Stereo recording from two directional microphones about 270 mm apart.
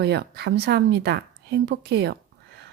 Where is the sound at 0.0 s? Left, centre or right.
Right.